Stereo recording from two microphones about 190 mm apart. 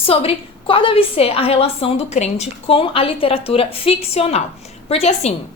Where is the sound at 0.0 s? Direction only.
30° left (ahead or behind).